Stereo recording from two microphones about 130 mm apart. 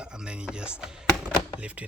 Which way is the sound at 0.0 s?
5° right (ahead or behind).